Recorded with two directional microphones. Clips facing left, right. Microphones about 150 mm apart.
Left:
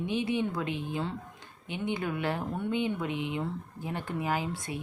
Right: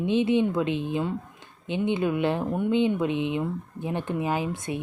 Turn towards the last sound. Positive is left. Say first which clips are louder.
# right 4 dB
turn(degrees=-20)  # may be behind; listen again after turning